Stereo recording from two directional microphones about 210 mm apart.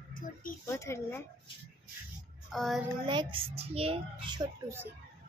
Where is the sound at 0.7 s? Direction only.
15° left (ahead or behind).